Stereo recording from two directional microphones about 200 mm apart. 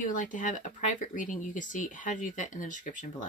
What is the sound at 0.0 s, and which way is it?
Speech, 40° left (ahead or behind).